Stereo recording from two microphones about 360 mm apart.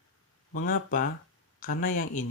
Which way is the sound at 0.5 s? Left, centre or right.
Left.